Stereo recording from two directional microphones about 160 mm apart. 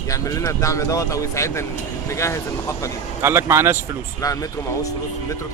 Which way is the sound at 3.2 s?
15° right (ahead or behind).